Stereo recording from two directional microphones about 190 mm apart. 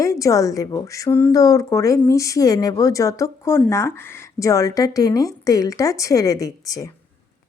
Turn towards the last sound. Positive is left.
turn(degrees=15)  # may be behind; listen again after turning